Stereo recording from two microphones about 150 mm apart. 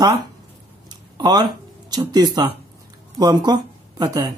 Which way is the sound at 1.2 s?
30° right (ahead or behind).